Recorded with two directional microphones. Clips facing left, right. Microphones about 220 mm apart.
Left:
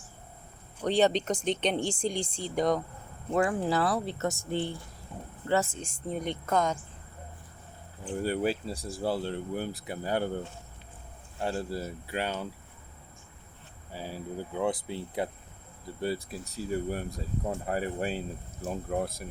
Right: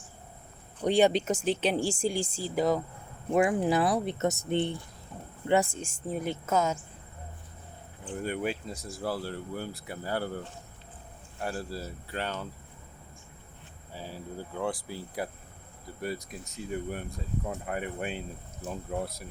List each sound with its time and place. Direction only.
0.8 s speech: 10° right (ahead or behind)
3.3 s speech: 15° right (ahead or behind)
8.2 s speech: 35° left (ahead or behind); by 10.3 s 20° left (ahead or behind)
11.3 s speech: 25° left (ahead or behind)
13.9 s speech: 10° left (ahead or behind); by 18.2 s 35° left (ahead or behind)
18.9 s speech: 50° left (ahead or behind)